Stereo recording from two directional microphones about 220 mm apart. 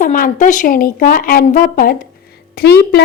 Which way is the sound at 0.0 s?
35° left (ahead or behind).